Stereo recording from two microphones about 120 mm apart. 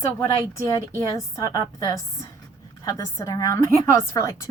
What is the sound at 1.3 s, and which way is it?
Speech, 25° left (ahead or behind).